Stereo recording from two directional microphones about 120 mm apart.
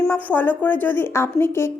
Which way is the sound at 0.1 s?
15° left (ahead or behind).